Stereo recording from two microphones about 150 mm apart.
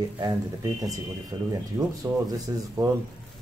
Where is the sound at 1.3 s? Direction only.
25° right (ahead or behind).